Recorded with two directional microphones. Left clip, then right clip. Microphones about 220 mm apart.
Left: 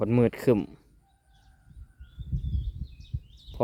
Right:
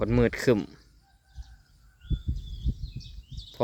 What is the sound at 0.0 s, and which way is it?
Speech, 5° left (ahead or behind).